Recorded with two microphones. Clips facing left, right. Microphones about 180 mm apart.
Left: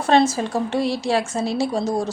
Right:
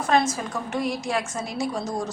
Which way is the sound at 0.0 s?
30° left (ahead or behind).